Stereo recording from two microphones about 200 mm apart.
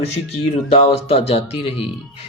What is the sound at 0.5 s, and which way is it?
Speech, 30° left (ahead or behind).